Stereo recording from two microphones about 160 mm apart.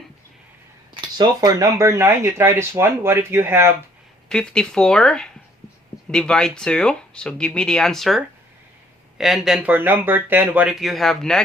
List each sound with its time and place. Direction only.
1.0 s speech: 25° right (ahead or behind)
4.3 s speech: 5° left (ahead or behind)